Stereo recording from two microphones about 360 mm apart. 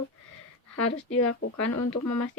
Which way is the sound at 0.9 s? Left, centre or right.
Left.